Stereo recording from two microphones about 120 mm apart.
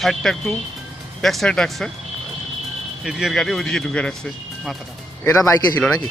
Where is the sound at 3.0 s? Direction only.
5° right (ahead or behind).